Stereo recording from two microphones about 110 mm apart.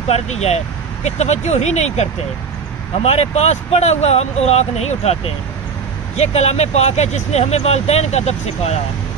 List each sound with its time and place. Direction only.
0.1 s speech: 80° left
3.0 s speech: 70° left (ahead or behind)